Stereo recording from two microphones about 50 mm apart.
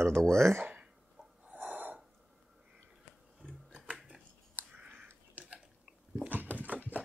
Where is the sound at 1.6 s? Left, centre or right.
Right.